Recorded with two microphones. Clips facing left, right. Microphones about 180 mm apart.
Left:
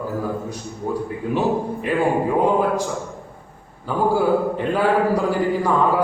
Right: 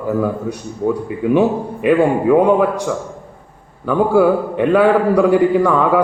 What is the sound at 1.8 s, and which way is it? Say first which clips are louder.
Speech: right 8 dB; 65° right (ahead or behind).